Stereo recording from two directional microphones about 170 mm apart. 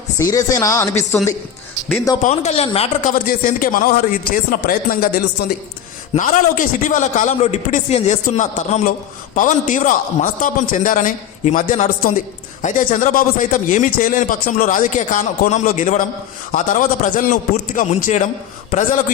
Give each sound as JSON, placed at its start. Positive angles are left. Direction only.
{"t": 0.2, "sound": "speech", "side_deg": 20}
{"t": 2.2, "sound": "speech", "side_deg": 40}
{"t": 3.1, "sound": "a man's voice", "side_deg": 55}
{"t": 6.1, "sound": "a man's voice", "side_deg": 50}